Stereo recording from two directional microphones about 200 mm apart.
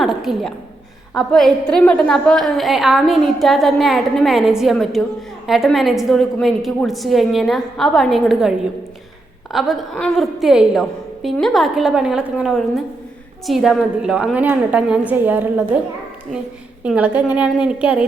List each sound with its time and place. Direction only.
0.0 s a sound: centre (ahead or behind)
1.1 s a woman's voice: centre (ahead or behind)
16.8 s a woman's voice: 5° right (ahead or behind)